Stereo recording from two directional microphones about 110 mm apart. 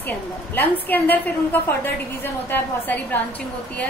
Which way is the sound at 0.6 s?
15° left (ahead or behind).